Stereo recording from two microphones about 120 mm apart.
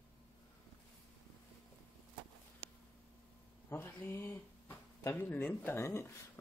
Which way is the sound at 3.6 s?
20° left (ahead or behind).